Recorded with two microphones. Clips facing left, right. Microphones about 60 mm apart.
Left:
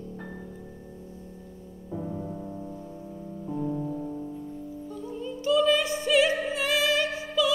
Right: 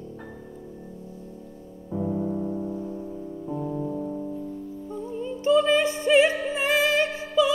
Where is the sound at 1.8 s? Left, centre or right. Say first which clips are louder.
Right 7 dB; centre.